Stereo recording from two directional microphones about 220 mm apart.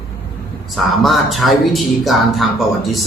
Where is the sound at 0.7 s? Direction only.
Centre (ahead or behind).